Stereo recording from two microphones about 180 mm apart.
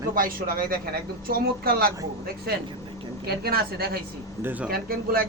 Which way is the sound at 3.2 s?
60° right (ahead or behind).